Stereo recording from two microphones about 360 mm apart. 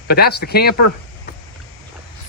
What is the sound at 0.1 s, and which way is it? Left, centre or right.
Speech, left.